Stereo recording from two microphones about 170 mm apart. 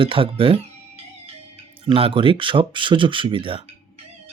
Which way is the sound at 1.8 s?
30° right (ahead or behind).